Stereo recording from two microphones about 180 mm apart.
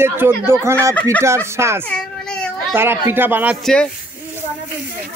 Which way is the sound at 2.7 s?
10° right (ahead or behind).